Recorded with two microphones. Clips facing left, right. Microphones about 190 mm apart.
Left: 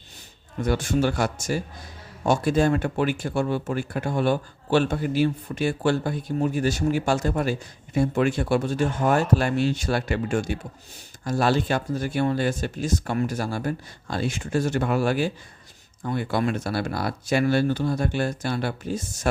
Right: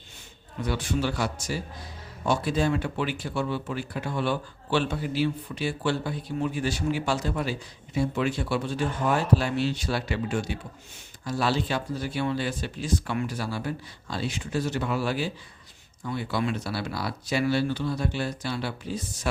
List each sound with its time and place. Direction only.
0.6 s speech: 45° left (ahead or behind)